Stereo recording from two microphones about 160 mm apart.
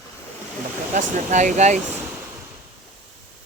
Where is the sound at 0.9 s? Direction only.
50° right (ahead or behind).